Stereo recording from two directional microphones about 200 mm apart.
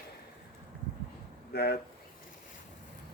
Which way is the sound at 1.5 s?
55° left (ahead or behind).